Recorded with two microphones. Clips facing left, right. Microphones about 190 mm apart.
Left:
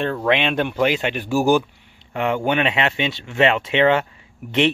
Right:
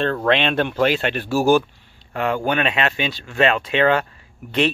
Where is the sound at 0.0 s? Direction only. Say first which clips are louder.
Right 1 dB; 10° left (ahead or behind).